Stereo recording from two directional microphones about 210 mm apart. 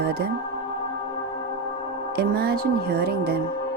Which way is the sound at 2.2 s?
45° right (ahead or behind).